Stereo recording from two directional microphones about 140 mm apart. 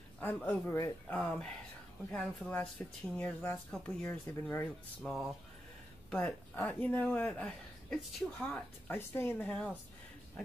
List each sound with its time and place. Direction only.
0.2 s a woman's voice: 15° left (ahead or behind)
5.0 s speech: centre (ahead or behind)
6.0 s a woman's voice: 10° left (ahead or behind)